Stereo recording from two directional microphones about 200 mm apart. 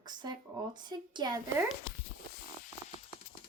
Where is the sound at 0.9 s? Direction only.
20° right (ahead or behind).